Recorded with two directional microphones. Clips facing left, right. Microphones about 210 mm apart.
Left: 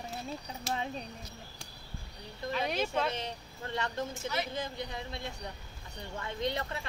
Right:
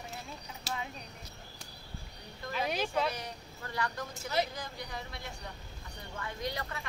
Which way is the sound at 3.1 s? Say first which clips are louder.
Left 3 dB; 25° left (ahead or behind).